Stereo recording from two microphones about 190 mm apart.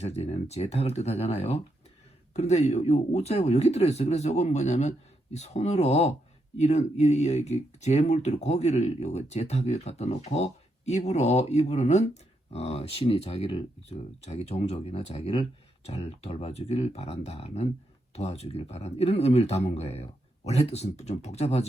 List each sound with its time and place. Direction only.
0.0 s speech: 35° left (ahead or behind)